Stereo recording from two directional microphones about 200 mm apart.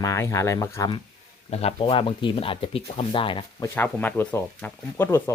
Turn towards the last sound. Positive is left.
turn(degrees=10)  # may be behind; listen again after turning